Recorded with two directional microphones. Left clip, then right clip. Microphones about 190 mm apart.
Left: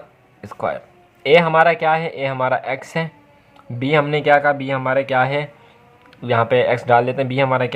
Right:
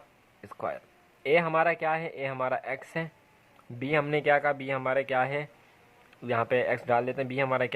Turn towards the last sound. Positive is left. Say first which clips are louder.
# left 10 dB
turn(degrees=-25)  # may be behind; listen again after turning